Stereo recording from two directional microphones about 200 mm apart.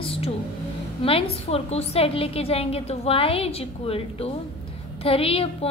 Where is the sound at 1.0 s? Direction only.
30° left (ahead or behind).